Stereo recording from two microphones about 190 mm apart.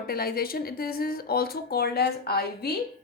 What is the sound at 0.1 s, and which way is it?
A woman's voice, 50° left (ahead or behind).